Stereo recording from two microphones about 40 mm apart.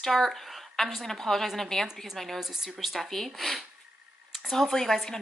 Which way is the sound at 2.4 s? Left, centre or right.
Centre.